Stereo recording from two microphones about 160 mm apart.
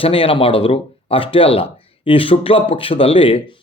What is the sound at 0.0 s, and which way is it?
Speech, 35° left (ahead or behind).